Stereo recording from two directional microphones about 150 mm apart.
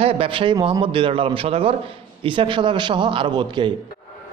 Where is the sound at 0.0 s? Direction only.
35° right (ahead or behind).